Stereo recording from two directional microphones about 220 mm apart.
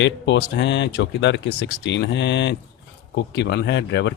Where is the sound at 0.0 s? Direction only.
50° left (ahead or behind).